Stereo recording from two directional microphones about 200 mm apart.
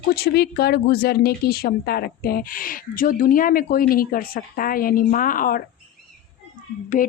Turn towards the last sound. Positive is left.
turn(degrees=40)  # may be behind; listen again after turning